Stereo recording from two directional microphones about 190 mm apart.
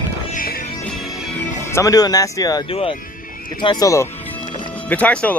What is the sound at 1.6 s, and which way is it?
Speech, 15° left (ahead or behind).